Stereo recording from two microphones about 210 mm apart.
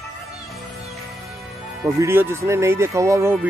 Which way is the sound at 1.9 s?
10° right (ahead or behind).